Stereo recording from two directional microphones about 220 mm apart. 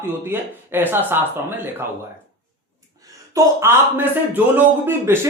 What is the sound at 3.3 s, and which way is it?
Speech, 10° right (ahead or behind).